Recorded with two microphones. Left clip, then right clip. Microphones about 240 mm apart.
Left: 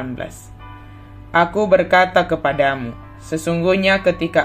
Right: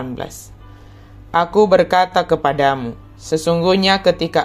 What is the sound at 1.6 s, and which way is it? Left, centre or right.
Speech, right.